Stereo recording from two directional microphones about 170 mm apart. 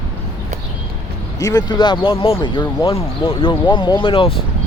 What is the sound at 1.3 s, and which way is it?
Speech, 20° left (ahead or behind).